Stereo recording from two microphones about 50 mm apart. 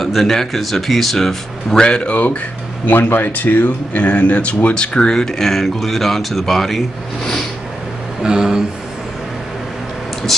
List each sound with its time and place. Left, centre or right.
0.0 s speech: centre
2.9 s speech: left; by 6.8 s centre
8.2 s a sound: centre